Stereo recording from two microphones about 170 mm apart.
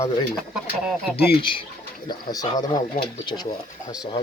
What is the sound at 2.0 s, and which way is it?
Speech, 25° left (ahead or behind).